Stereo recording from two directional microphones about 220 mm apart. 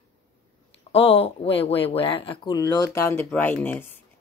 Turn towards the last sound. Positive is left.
turn(degrees=10)  # may be behind; listen again after turning